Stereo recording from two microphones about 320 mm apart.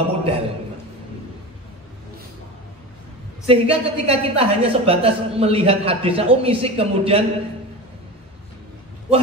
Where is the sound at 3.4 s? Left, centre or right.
Centre.